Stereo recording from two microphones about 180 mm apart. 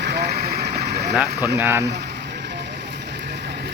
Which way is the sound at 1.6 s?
15° right (ahead or behind).